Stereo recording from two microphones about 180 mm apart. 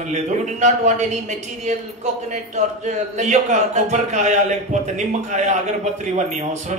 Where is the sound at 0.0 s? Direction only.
40° right (ahead or behind).